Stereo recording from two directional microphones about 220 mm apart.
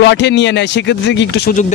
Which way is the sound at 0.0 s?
50° left (ahead or behind).